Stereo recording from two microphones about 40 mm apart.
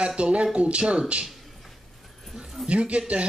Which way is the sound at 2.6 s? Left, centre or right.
Right.